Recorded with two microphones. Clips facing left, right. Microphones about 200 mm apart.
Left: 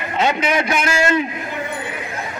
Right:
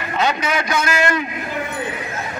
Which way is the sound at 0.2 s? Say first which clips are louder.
Left 2 dB; 25° left (ahead or behind).